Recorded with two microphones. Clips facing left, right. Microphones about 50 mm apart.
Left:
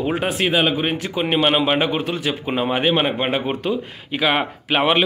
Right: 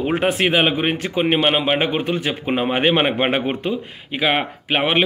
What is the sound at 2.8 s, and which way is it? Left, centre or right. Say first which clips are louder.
Speech: right 3 dB; right.